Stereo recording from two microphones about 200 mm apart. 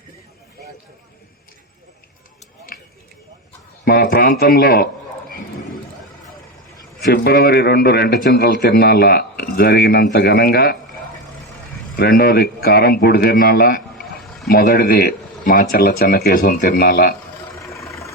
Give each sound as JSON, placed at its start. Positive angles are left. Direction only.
{"t": 2.7, "sound": "a sound", "side_deg": 45}
{"t": 3.8, "sound": "a man's voice", "side_deg": 50}
{"t": 7.0, "sound": "a man's voice", "side_deg": 55}
{"t": 11.9, "sound": "a man's voice", "side_deg": 50}
{"t": 17.7, "sound": "vehicle", "side_deg": 15}